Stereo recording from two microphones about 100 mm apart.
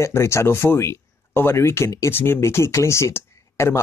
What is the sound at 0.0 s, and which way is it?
Speech, 30° left (ahead or behind).